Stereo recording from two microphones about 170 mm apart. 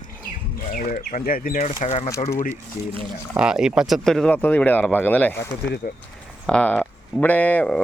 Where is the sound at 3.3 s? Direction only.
5° right (ahead or behind).